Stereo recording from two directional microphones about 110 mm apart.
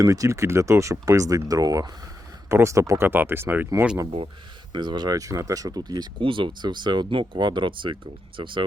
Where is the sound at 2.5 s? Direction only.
25° right (ahead or behind).